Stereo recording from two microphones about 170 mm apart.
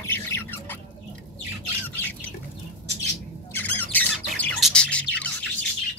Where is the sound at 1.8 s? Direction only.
10° left (ahead or behind).